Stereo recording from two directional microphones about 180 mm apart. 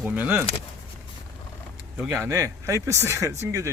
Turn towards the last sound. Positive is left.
turn(degrees=-15)  # may be behind; listen again after turning